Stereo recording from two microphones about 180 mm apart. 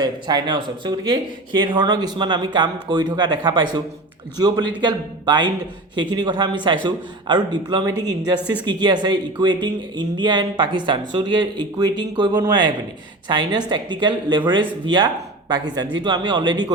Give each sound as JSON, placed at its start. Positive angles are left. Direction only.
{"t": 0.0, "sound": "speech", "side_deg": -25}